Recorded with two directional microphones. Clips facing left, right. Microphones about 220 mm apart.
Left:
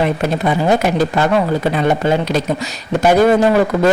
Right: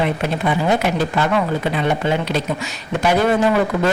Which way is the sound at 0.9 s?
40° left (ahead or behind).